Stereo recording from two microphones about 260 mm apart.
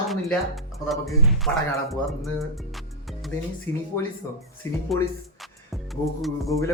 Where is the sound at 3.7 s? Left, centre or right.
Centre.